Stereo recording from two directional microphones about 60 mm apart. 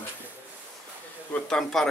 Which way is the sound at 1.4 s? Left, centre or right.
Centre.